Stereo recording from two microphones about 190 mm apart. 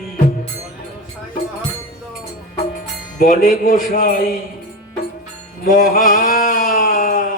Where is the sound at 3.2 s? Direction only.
45° left (ahead or behind).